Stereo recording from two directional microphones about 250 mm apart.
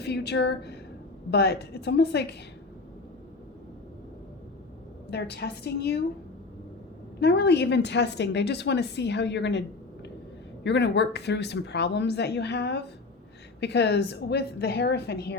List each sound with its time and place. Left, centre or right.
0.0 s a woman's voice: left
5.1 s a woman's voice: left
7.2 s a woman's voice: left